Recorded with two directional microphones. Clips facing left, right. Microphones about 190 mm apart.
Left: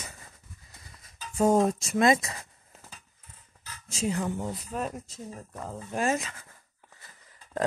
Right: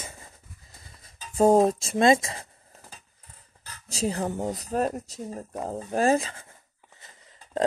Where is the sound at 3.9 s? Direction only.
35° right (ahead or behind).